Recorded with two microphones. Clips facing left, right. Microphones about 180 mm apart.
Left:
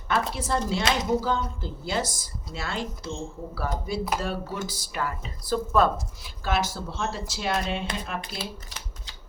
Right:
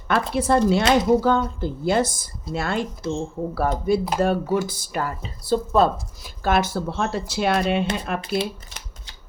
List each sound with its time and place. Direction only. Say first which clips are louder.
0.1 s speech: right 7 dB; 60° right (ahead or behind); by 5.3 s 40° right (ahead or behind)
5.5 s speech: right 4 dB; 30° right (ahead or behind)
6.2 s speech: right 6 dB; 50° right (ahead or behind)